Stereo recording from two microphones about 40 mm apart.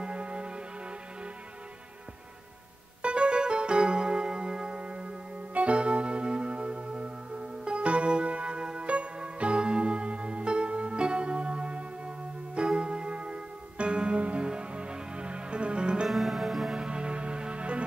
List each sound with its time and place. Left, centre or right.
0.0 s music: right
3.0 s keyboard: right
12.5 s music: right
16.1 s music: centre
16.7 s music: right